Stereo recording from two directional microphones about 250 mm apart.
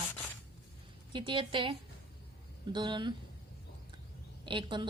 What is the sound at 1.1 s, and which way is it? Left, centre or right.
Speech, centre.